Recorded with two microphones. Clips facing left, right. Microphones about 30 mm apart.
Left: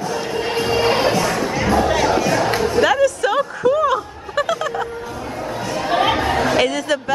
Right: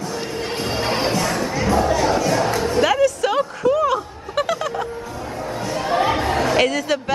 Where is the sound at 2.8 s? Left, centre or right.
Centre.